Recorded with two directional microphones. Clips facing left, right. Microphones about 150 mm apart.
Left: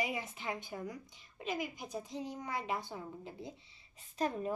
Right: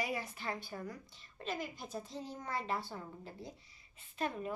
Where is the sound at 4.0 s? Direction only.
40° left (ahead or behind).